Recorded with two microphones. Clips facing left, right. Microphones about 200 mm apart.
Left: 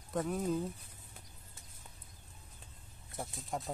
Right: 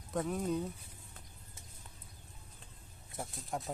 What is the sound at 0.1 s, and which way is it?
Speech, centre (ahead or behind).